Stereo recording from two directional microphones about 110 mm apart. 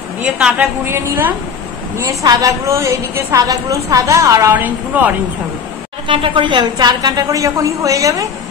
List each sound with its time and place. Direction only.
0.2 s a woman's voice: 15° right (ahead or behind)
2.0 s a woman's voice: 35° right (ahead or behind)
2.6 s a woman's voice: 25° right (ahead or behind)
4.5 s a woman's voice: 15° right (ahead or behind)
6.0 s a woman's voice: 50° right (ahead or behind); by 8.3 s 30° right (ahead or behind)